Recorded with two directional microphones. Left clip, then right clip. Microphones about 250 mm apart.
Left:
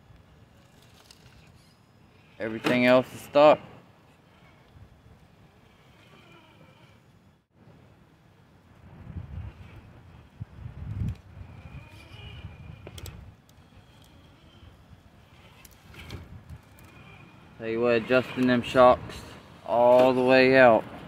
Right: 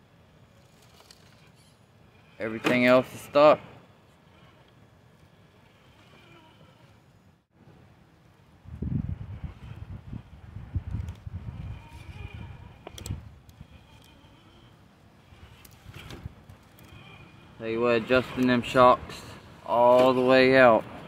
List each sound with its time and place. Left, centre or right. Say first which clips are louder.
2.3 s speech: even; centre
12.8 s a sound: right 2 dB; centre
17.6 s speech: even; centre